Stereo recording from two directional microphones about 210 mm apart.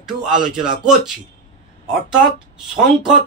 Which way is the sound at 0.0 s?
5° right (ahead or behind).